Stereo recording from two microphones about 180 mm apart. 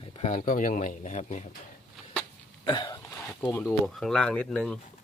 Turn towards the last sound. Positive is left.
turn(degrees=5)  # may be behind; listen again after turning